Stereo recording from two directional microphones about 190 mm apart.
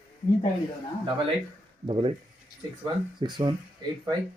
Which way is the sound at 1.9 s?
25° right (ahead or behind).